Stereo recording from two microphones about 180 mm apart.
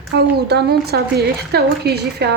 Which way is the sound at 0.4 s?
65° right (ahead or behind).